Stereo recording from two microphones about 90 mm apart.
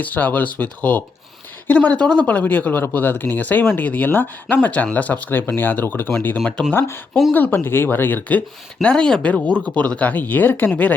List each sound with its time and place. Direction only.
0.0 s speech: 20° left (ahead or behind)
7.1 s speech: centre (ahead or behind)
7.3 s speech: 20° left (ahead or behind)